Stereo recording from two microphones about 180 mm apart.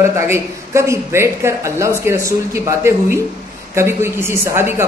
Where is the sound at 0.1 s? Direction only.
15° right (ahead or behind).